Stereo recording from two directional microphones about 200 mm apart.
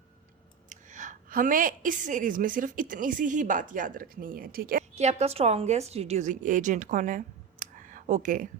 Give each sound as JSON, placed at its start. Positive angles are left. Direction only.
{"t": 0.7, "sound": "a woman's voice", "side_deg": -40}
{"t": 4.9, "sound": "a woman's voice", "side_deg": -30}